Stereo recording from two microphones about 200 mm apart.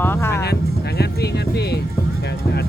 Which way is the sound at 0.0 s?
10° left (ahead or behind).